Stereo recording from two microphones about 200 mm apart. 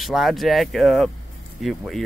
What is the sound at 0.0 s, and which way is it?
Speech, centre (ahead or behind).